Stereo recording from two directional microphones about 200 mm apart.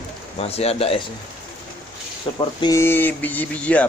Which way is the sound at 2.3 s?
20° left (ahead or behind).